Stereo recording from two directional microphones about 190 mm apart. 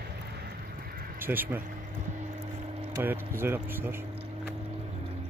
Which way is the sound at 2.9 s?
10° right (ahead or behind).